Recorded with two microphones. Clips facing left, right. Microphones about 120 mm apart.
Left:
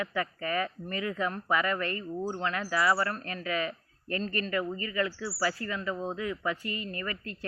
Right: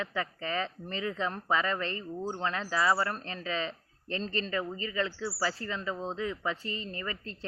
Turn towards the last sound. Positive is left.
turn(degrees=-25)  # may be behind; listen again after turning